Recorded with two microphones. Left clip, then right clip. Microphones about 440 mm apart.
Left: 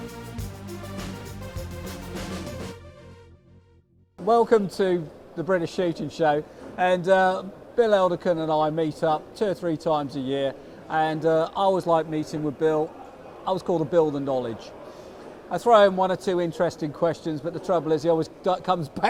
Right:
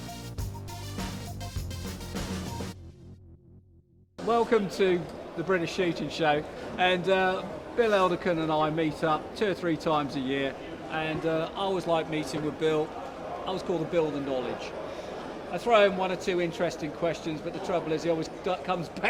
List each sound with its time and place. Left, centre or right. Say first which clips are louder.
4.3 s speech: left 6 dB; left
10.9 s speech: left 8 dB; left
13.4 s speech: left 7 dB; left
15.5 s speech: left 5 dB; left